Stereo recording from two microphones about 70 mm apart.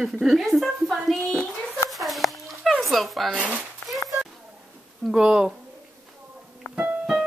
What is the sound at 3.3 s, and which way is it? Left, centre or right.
Speech, centre.